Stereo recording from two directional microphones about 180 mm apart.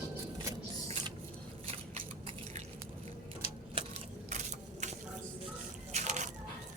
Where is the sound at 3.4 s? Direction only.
35° left (ahead or behind).